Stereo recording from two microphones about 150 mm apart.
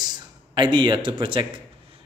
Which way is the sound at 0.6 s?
30° right (ahead or behind).